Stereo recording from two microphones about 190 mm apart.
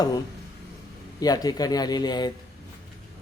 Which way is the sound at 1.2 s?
20° left (ahead or behind).